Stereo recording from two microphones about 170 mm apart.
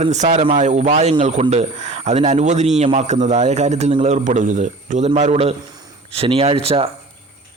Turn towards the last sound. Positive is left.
turn(degrees=-35)  # may be behind; listen again after turning